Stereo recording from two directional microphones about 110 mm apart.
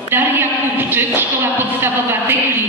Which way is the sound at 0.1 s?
20° right (ahead or behind).